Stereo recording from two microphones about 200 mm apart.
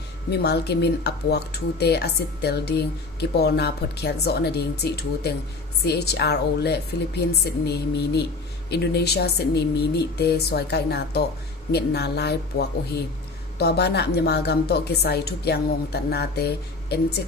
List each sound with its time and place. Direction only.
0.3 s a woman's voice: 55° left (ahead or behind)